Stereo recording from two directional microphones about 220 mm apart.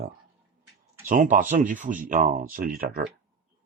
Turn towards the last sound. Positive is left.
turn(degrees=-40)  # may be behind; listen again after turning